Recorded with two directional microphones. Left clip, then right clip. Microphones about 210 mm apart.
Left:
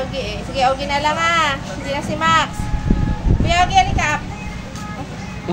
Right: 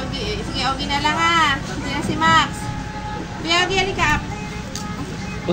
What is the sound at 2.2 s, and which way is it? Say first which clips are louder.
A woman's voice: even; 40° left (ahead or behind).